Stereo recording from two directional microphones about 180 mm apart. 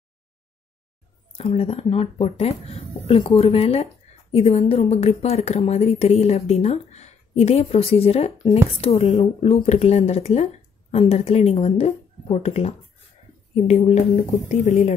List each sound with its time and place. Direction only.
1.3 s speech: 35° left (ahead or behind)